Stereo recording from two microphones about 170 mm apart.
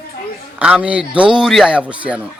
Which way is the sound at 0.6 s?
5° right (ahead or behind).